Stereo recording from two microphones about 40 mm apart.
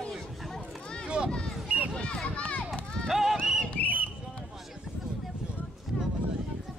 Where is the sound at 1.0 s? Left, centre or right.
Right.